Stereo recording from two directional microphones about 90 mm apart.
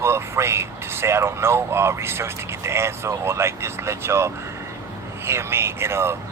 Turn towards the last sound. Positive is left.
turn(degrees=-30)  # may be behind; listen again after turning